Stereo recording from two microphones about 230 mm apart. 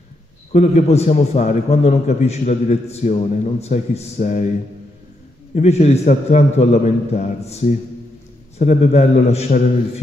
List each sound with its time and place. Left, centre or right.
0.5 s a man's voice: left
5.5 s a man's voice: left